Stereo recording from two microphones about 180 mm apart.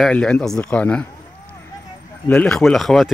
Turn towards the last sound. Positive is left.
turn(degrees=0)  # may be behind; listen again after turning